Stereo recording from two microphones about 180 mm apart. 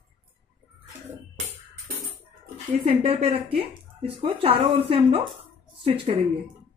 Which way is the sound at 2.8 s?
35° right (ahead or behind).